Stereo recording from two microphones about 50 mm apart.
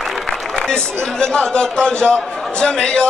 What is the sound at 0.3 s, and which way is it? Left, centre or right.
A man's voice, centre.